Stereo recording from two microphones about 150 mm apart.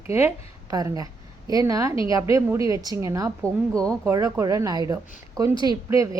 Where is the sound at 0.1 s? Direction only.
20° right (ahead or behind).